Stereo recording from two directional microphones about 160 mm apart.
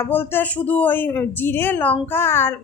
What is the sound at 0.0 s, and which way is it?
A woman's voice, 15° left (ahead or behind).